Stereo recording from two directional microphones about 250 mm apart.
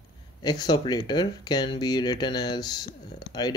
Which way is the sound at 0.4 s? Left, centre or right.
Centre.